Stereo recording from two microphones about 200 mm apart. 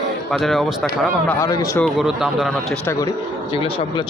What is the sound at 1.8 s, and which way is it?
Speech, 5° right (ahead or behind).